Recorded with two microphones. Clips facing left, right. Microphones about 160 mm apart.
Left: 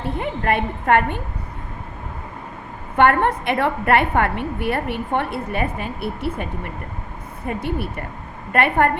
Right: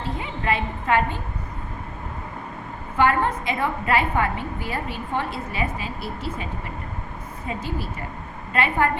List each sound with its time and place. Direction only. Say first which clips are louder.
0.0 s a woman's voice: left 4 dB; 55° left (ahead or behind)
3.0 s a woman's voice: left 4 dB; 65° left (ahead or behind)